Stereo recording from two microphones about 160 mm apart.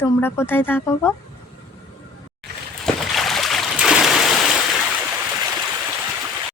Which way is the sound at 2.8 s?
Centre (ahead or behind).